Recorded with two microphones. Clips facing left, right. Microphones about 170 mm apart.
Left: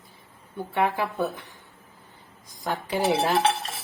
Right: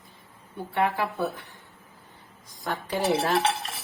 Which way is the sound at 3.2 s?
Centre (ahead or behind).